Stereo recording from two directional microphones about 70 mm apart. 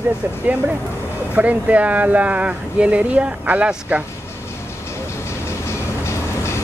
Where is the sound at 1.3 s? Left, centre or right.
Right.